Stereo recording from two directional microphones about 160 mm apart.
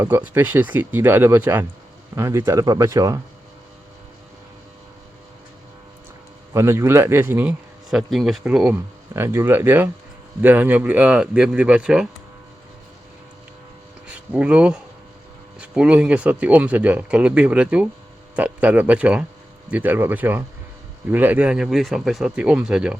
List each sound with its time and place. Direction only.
0.0 s speech: 10° right (ahead or behind)
6.5 s speech: 15° right (ahead or behind)
7.9 s speech: centre (ahead or behind)
14.1 s speech: 5° right (ahead or behind)